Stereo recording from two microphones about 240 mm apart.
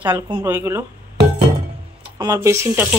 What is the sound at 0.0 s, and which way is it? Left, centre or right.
Speech, centre.